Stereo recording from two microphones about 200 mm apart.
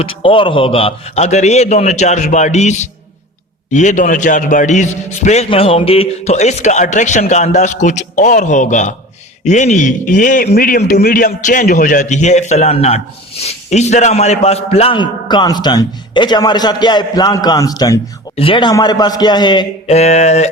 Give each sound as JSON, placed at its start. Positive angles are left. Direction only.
{"t": 0.0, "sound": "a man's voice", "side_deg": 25}
{"t": 19.9, "sound": "a man's voice", "side_deg": 35}